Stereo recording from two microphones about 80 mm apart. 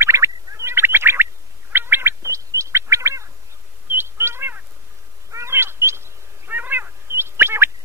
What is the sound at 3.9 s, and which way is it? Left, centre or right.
Bird, right.